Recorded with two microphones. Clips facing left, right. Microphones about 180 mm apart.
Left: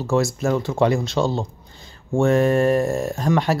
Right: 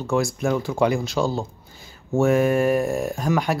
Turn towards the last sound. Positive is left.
turn(degrees=0)  # may be behind; listen again after turning